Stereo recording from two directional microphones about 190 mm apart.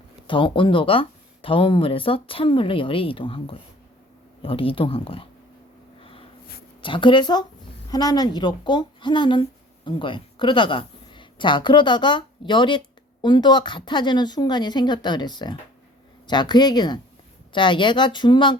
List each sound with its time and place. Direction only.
0.3 s speech: 25° left (ahead or behind)
6.0 s a sound: 30° left (ahead or behind)
6.8 s speech: 25° left (ahead or behind)